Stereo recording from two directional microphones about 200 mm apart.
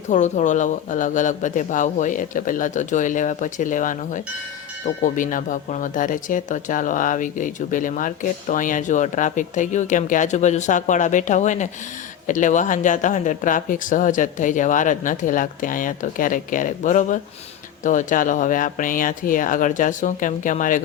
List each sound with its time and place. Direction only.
0.1 s speech: 35° left (ahead or behind)